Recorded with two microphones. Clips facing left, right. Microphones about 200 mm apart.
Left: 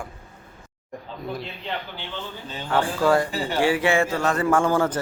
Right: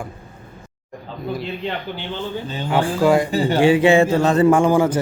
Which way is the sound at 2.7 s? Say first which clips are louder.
Right 4 dB; 15° right (ahead or behind).